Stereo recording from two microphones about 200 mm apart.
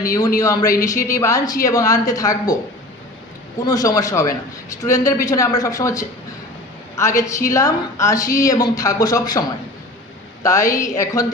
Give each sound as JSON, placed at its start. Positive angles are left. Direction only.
{"t": 0.0, "sound": "a woman's voice", "side_deg": 15}
{"t": 3.7, "sound": "a woman's voice", "side_deg": 15}
{"t": 10.4, "sound": "a woman's voice", "side_deg": 15}